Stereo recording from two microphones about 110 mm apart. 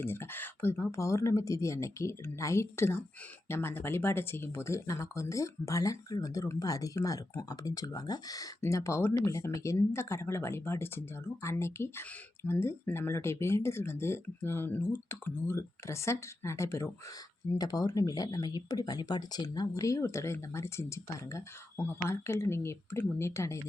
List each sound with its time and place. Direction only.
0.0 s speech: 20° left (ahead or behind)